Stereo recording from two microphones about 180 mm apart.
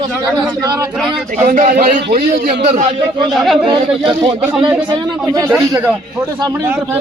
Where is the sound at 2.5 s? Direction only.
30° right (ahead or behind).